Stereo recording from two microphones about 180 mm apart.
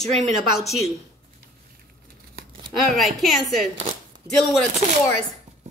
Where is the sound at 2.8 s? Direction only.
Centre (ahead or behind).